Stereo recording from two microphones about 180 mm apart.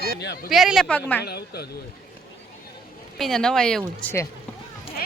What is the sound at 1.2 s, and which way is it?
Speech, 65° left (ahead or behind).